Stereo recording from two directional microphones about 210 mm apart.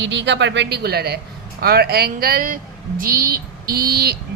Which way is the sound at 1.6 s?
45° right (ahead or behind).